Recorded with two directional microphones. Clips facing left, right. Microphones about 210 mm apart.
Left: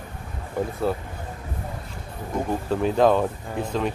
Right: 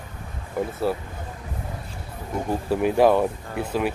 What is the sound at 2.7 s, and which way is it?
Speech, 10° right (ahead or behind).